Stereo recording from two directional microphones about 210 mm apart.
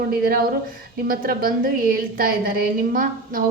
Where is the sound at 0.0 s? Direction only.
45° right (ahead or behind).